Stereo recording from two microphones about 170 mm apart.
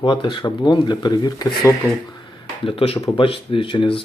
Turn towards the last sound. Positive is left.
turn(degrees=30)  # may be behind; listen again after turning